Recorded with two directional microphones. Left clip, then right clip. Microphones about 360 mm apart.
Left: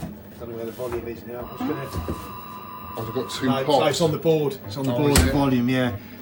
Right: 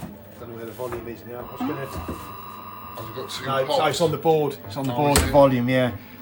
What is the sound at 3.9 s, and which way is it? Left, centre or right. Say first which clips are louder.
Speech: right 1 dB; centre.